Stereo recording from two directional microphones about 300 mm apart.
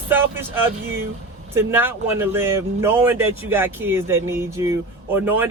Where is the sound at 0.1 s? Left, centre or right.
Centre.